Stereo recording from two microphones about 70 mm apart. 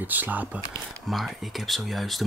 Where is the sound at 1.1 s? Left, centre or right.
Centre.